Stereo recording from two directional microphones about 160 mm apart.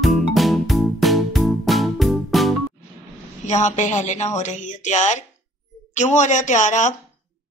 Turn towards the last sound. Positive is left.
turn(degrees=50)  # may be behind; listen again after turning